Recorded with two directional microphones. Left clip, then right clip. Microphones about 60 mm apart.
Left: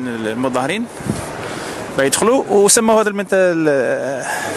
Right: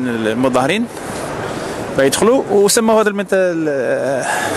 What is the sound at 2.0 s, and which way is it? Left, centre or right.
Speech, centre.